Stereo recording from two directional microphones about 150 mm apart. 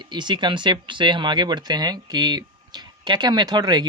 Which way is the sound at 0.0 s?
30° right (ahead or behind).